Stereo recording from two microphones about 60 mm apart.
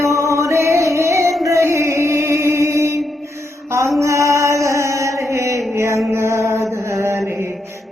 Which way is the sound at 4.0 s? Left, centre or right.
Right.